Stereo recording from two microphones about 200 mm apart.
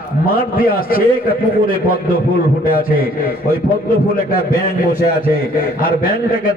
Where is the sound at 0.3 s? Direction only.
45° left (ahead or behind).